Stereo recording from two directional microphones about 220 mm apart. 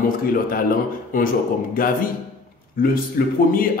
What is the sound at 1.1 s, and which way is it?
A man's voice, 40° left (ahead or behind).